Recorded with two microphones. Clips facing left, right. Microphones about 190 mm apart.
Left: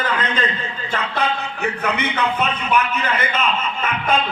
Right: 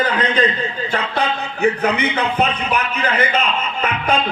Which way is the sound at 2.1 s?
35° right (ahead or behind).